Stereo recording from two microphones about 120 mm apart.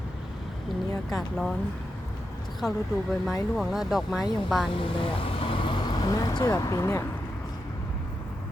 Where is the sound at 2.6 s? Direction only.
25° left (ahead or behind).